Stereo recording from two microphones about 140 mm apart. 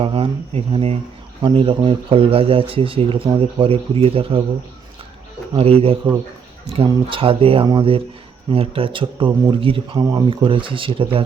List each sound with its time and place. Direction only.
0.0 s speech: 40° right (ahead or behind)
5.5 s speech: 45° right (ahead or behind)